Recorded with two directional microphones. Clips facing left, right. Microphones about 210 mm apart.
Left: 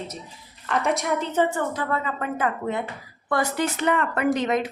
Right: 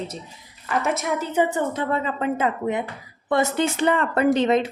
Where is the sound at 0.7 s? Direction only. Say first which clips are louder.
Even; centre (ahead or behind).